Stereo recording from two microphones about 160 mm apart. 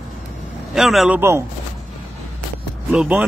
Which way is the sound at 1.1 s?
15° right (ahead or behind).